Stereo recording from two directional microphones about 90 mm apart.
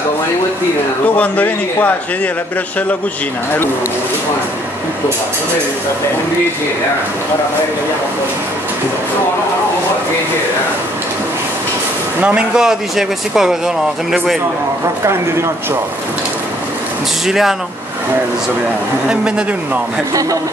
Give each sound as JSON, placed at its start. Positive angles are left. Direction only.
{"t": 1.0, "sound": "a man's voice", "side_deg": 15}
{"t": 12.2, "sound": "speech", "side_deg": -15}
{"t": 17.3, "sound": "speech", "side_deg": -5}
{"t": 19.0, "sound": "speech", "side_deg": -10}